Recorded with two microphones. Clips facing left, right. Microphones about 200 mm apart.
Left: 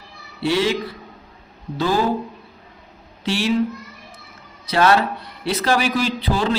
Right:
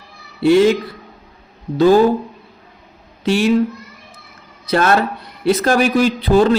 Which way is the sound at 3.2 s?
50° right (ahead or behind).